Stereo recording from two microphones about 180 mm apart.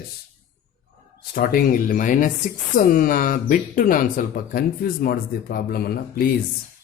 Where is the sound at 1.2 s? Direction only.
55° left (ahead or behind).